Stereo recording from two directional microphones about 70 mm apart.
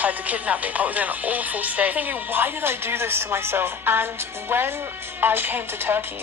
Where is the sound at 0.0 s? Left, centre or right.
Right.